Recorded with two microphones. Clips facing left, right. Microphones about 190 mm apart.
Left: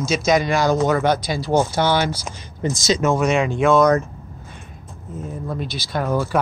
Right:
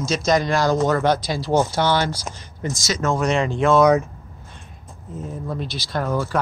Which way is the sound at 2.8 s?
15° left (ahead or behind).